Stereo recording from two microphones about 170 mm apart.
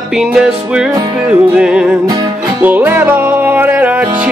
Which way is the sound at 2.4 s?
10° right (ahead or behind).